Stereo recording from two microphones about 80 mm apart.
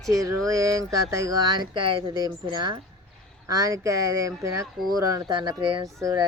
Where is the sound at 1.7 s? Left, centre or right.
Right.